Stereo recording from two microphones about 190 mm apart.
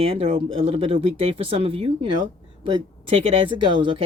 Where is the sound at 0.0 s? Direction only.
30° right (ahead or behind).